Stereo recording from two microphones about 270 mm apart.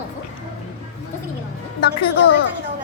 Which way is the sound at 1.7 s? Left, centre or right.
Left.